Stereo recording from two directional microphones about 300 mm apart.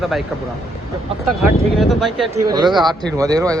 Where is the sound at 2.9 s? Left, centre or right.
Centre.